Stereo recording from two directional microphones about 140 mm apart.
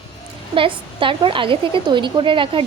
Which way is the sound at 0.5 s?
40° right (ahead or behind).